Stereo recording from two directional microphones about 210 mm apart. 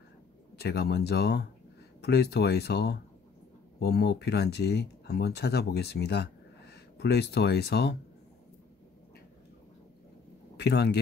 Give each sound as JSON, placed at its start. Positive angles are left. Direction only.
{"t": 0.6, "sound": "speech", "side_deg": 50}
{"t": 10.6, "sound": "speech", "side_deg": 50}